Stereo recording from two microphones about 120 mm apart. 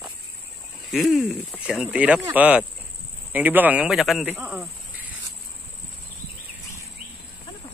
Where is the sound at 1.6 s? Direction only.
10° right (ahead or behind).